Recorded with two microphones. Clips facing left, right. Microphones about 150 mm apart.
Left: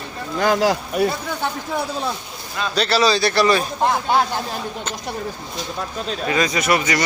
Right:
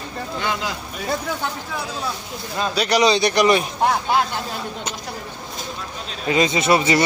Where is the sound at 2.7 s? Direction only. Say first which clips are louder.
Even; 15° right (ahead or behind).